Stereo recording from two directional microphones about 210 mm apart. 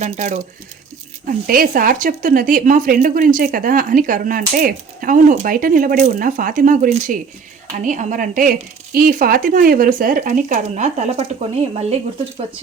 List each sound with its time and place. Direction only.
0.0 s speech: 35° right (ahead or behind)
1.5 s speech: 40° right (ahead or behind)